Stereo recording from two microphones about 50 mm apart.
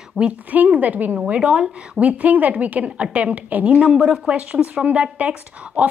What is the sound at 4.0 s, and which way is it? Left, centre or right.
A woman's voice, centre.